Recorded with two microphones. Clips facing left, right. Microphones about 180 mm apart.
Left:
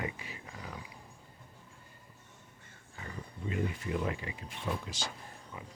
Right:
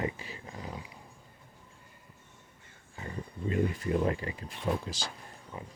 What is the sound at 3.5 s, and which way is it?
Speech, 40° right (ahead or behind).